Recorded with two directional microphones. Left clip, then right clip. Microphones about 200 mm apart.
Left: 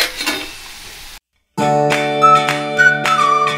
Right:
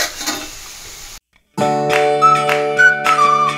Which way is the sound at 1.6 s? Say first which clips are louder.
Even; centre (ahead or behind).